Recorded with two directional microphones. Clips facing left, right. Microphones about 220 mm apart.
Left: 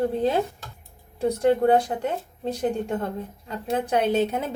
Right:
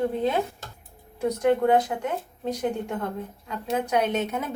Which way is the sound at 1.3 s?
30° left (ahead or behind).